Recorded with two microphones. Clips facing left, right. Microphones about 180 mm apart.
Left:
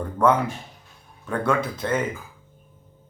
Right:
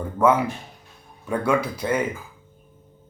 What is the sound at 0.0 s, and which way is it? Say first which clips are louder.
Speech: right 1 dB; 5° right (ahead or behind).